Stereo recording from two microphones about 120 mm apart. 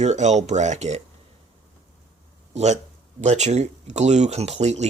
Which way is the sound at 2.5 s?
65° right (ahead or behind).